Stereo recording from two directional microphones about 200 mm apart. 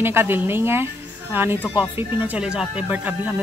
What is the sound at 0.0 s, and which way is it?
A woman's voice, 10° right (ahead or behind).